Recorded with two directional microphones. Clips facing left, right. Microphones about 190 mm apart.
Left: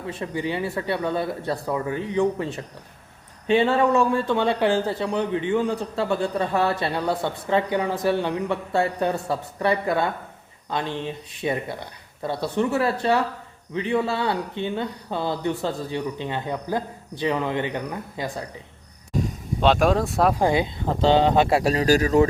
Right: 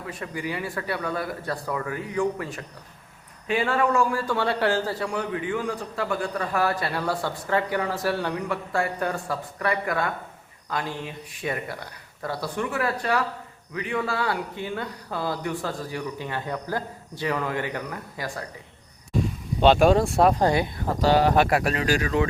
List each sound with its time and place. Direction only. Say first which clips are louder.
0.0 s speech: left 4 dB; 25° left (ahead or behind)
19.6 s speech: right 2 dB; centre (ahead or behind)
20.4 s speech: left 1 dB; 15° left (ahead or behind); by 22.3 s 40° left (ahead or behind)